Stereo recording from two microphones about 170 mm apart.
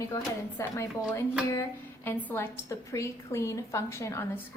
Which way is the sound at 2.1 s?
10° left (ahead or behind).